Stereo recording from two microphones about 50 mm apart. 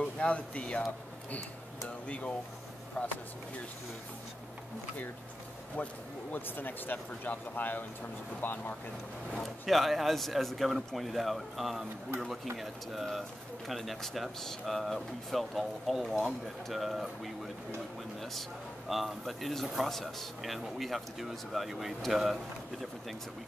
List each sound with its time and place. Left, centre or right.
0.0 s speech: left
2.0 s speech: left
5.8 s speech: left
9.7 s speech: centre
18.9 s speech: centre